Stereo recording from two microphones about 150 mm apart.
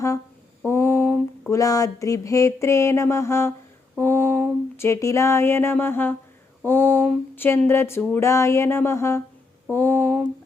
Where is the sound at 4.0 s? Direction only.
15° left (ahead or behind).